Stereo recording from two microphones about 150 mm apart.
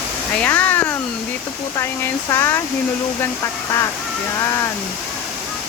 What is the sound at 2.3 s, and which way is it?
Speech, 20° left (ahead or behind).